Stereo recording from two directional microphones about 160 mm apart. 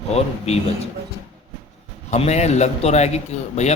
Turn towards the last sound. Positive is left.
turn(degrees=45)  # may be behind; listen again after turning